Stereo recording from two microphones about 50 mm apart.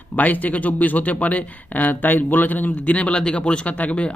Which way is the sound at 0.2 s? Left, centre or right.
Left.